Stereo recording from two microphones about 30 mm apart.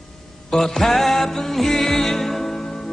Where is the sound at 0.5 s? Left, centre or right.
Centre.